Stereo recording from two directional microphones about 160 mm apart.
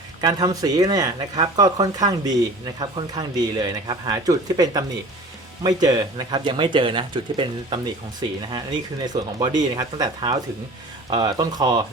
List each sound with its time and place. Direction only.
0.2 s speech: 25° right (ahead or behind)